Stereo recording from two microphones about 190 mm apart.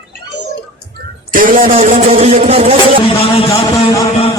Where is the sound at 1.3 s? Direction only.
45° right (ahead or behind).